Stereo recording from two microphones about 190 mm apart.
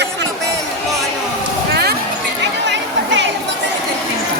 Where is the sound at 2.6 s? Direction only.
70° right (ahead or behind).